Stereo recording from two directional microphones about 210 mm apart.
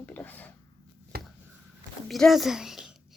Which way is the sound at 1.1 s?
45° right (ahead or behind).